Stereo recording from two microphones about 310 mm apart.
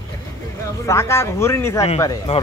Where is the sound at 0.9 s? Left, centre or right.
Centre.